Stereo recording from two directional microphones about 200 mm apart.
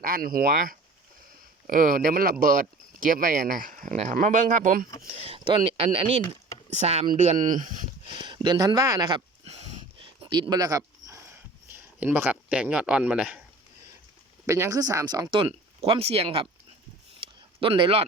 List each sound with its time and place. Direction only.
0.0 s speech: 45° right (ahead or behind)
5.0 s speech: 30° right (ahead or behind)
8.1 s a sound: 25° right (ahead or behind)
10.2 s speech: 25° right (ahead or behind); by 13.4 s 5° right (ahead or behind)
14.4 s speech: 15° right (ahead or behind)
17.2 s a sound: 25° right (ahead or behind)